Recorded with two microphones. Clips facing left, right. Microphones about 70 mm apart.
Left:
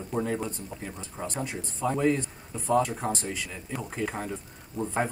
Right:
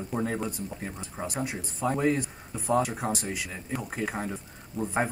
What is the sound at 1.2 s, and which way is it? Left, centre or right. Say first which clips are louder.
Speech: right 1 dB; centre.